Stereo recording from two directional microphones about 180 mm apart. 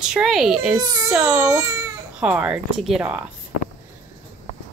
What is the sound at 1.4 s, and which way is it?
Speech, 15° right (ahead or behind).